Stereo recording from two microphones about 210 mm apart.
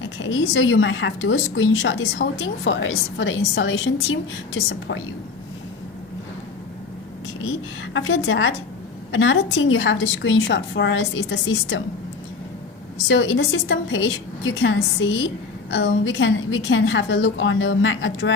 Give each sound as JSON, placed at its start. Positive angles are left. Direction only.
{"t": 0.2, "sound": "a woman's voice", "side_deg": 65}
{"t": 7.9, "sound": "a woman's voice", "side_deg": 65}
{"t": 13.1, "sound": "a woman's voice", "side_deg": 60}